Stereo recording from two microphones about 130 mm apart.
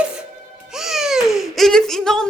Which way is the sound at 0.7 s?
Centre (ahead or behind).